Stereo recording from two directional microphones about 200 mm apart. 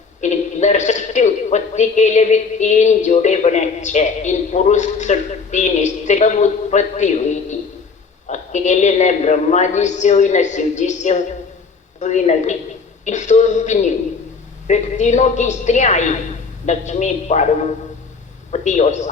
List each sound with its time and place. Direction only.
0.2 s a man's voice: 35° left (ahead or behind)